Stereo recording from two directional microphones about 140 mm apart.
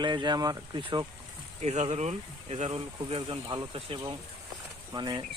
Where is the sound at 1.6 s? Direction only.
55° right (ahead or behind).